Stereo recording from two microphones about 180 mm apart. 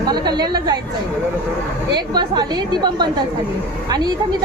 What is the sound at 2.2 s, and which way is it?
A woman's voice, 25° right (ahead or behind).